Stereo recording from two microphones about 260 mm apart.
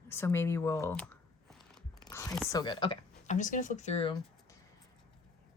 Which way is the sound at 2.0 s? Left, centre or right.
Centre.